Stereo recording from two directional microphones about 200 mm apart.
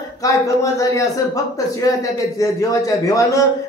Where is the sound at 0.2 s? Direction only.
15° left (ahead or behind).